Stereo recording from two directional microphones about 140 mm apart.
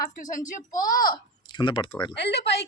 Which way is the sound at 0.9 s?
90° left.